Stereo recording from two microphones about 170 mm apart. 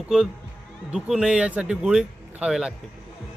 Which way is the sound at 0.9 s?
Centre (ahead or behind).